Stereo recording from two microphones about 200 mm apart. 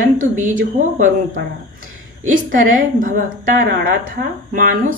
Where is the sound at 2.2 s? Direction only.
40° right (ahead or behind).